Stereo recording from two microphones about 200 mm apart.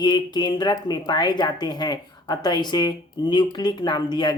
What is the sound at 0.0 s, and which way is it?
Speech, 20° left (ahead or behind).